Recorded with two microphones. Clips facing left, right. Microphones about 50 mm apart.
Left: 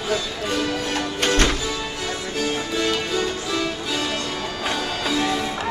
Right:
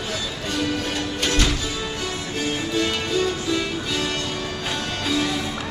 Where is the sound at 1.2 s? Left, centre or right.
Left.